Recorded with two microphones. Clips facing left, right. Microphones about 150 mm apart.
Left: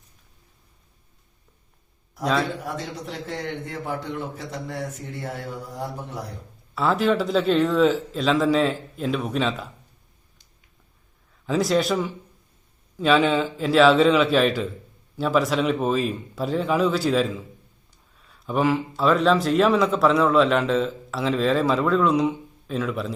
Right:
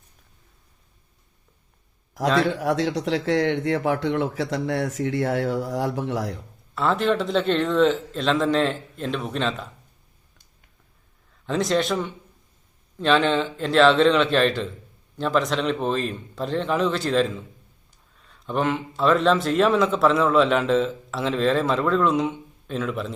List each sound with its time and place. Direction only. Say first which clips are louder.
2.6 s speech: right 9 dB; 90° right
6.7 s a man's voice: left 1 dB; centre (ahead or behind)
11.4 s a man's voice: left 1 dB; centre (ahead or behind)